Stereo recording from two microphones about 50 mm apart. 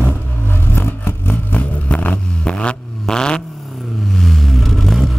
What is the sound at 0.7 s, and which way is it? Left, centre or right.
Vehicle, left.